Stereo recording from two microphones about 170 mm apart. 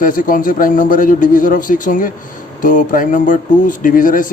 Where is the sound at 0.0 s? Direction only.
55° left (ahead or behind).